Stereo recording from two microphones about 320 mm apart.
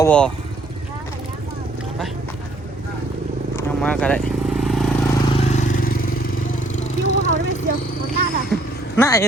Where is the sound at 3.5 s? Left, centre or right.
Centre.